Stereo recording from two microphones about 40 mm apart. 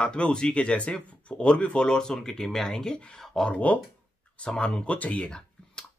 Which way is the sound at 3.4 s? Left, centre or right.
Left.